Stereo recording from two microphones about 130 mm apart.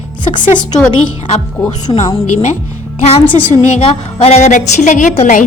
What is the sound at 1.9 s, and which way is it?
Speech, 30° left (ahead or behind).